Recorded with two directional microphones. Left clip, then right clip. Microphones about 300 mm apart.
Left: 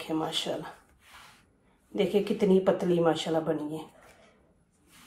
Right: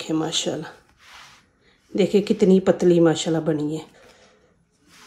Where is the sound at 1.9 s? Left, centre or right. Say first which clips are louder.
Right 7 dB; right.